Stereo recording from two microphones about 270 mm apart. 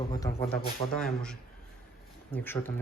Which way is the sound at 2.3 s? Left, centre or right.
Centre.